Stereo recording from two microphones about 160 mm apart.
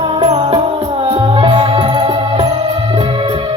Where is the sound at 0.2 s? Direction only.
30° right (ahead or behind).